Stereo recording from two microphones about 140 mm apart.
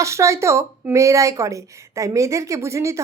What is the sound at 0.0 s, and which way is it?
Speech, 20° right (ahead or behind).